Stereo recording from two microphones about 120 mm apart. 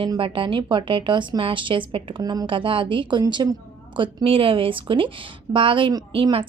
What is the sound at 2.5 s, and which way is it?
A woman's voice, 45° right (ahead or behind).